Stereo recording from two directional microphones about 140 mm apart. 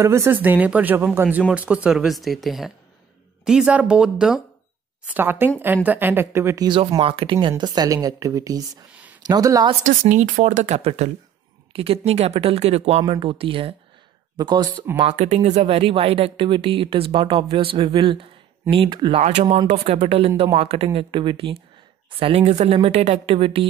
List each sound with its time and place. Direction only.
0.0 s speech: 20° right (ahead or behind)
7.0 s speech: 40° right (ahead or behind)
7.4 s speech: 30° right (ahead or behind)
8.9 s a sound: 10° right (ahead or behind)
9.2 s speech: 25° right (ahead or behind)
9.8 s speech: 60° right (ahead or behind); by 14.9 s 30° right (ahead or behind)
15.1 s speech: 60° right (ahead or behind)
15.6 s speech: 40° right (ahead or behind)
19.7 s speech: 55° right (ahead or behind); by 21.5 s 35° right (ahead or behind)
22.2 s speech: 50° right (ahead or behind)
23.3 s speech: 40° right (ahead or behind)